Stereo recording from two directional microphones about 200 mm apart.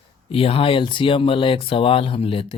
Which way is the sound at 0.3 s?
30° left (ahead or behind).